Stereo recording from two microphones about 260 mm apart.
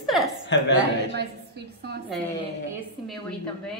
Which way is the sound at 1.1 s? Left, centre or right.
Right.